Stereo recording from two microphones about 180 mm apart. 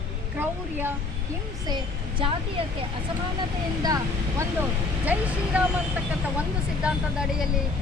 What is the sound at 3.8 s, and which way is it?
Speech, 20° right (ahead or behind).